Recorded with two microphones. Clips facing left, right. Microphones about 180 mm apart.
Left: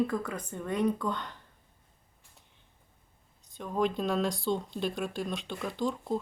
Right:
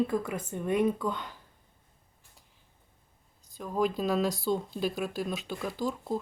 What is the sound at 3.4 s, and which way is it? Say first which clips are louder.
Speech: right 1 dB; centre (ahead or behind).